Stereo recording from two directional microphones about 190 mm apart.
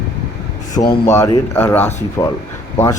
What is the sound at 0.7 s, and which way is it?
Speech, 20° left (ahead or behind).